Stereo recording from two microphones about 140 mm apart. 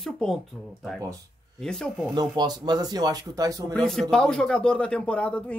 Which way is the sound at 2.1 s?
30° right (ahead or behind).